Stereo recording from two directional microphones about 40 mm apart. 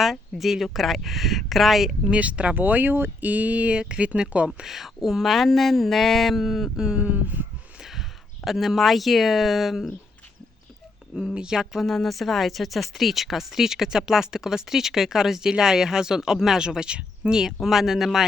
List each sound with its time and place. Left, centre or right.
0.0 s speech: centre
2.0 s speech: right
2.6 s speech: right
3.2 s speech: right
4.6 s speech: centre
7.0 s speech: right
8.4 s speech: centre
11.0 s a sound: right
11.3 s speech: centre
11.6 s speech: centre; by 17.4 s right
17.4 s speech: centre